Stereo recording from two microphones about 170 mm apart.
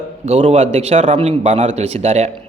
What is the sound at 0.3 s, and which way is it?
A man's voice, 35° right (ahead or behind).